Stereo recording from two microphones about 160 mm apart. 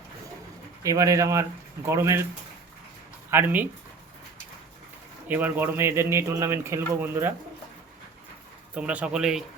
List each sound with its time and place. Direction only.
0.8 s speech: 20° right (ahead or behind)
3.2 s speech: 15° right (ahead or behind)
5.3 s speech: 10° right (ahead or behind)
8.7 s speech: 10° right (ahead or behind)